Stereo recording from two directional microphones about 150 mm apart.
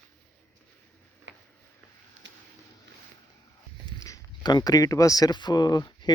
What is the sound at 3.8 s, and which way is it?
Speech, 25° left (ahead or behind).